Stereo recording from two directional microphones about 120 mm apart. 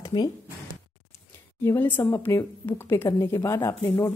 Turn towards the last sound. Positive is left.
turn(degrees=25)  # may be behind; listen again after turning